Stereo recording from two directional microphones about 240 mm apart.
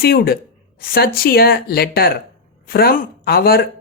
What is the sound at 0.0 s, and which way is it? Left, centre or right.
Speech, left.